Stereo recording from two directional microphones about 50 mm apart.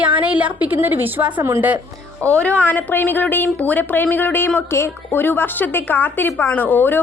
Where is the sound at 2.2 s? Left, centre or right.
Right.